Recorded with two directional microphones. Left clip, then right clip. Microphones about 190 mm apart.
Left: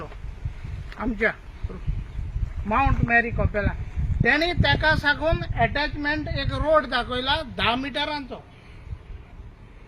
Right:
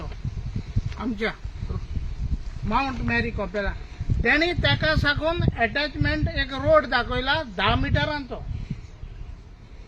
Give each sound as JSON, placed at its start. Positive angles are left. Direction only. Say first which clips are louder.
{"t": 2.7, "sound": "speech", "louder": "left 4 dB", "side_deg": -70}